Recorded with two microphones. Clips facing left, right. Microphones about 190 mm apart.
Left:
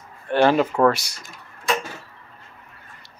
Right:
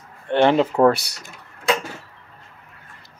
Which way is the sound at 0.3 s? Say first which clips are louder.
Right 1 dB; 25° right (ahead or behind).